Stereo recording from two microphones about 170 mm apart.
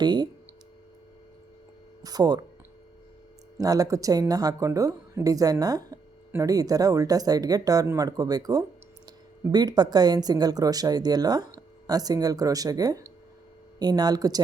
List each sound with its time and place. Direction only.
0.0 s speech: 25° right (ahead or behind)
2.0 s speech: 20° right (ahead or behind)
3.6 s speech: 20° right (ahead or behind)